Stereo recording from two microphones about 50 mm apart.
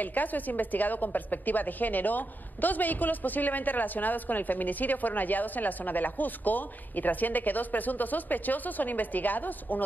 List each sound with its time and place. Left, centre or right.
0.0 s a woman's voice: left